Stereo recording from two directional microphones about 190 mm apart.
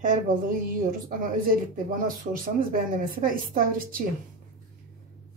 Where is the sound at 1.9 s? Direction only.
50° right (ahead or behind).